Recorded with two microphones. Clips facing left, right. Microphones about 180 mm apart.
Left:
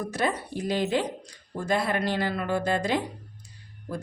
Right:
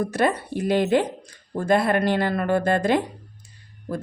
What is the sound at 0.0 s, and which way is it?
Speech, 60° right (ahead or behind).